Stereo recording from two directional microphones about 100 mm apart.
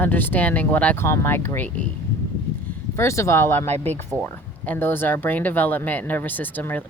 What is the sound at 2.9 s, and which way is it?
A woman's voice, 30° left (ahead or behind).